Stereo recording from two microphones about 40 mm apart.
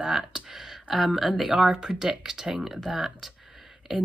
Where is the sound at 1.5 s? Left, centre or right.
Right.